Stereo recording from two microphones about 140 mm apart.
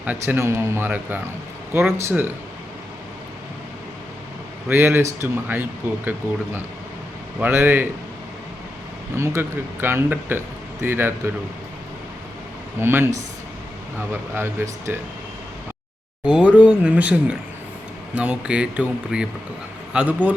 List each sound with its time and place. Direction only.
0.0 s speech: 10° right (ahead or behind)
4.7 s speech: 15° right (ahead or behind)
7.3 s speech: 10° right (ahead or behind)
9.1 s speech: 20° right (ahead or behind)
12.8 s speech: 15° right (ahead or behind)
14.1 s speech: 15° right (ahead or behind)
16.2 s speech: 10° right (ahead or behind)